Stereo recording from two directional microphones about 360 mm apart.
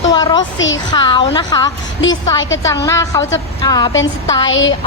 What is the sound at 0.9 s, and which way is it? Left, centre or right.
Speech, centre.